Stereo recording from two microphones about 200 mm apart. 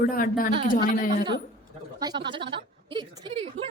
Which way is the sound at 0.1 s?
45° left (ahead or behind).